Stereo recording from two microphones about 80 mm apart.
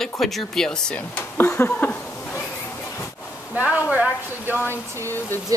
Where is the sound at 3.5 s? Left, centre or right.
Centre.